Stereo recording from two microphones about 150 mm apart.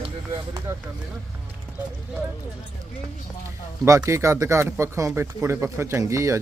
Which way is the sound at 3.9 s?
20° right (ahead or behind).